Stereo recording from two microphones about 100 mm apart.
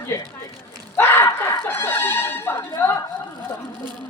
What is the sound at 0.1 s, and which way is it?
Speech, 25° left (ahead or behind).